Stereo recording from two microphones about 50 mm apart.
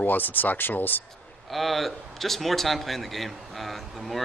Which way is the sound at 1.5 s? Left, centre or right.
Centre.